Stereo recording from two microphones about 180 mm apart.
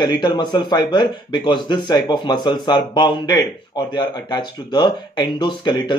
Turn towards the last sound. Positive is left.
turn(degrees=25)  # may be behind; listen again after turning